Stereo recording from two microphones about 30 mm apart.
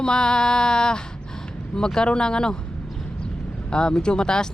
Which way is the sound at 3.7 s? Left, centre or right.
Left.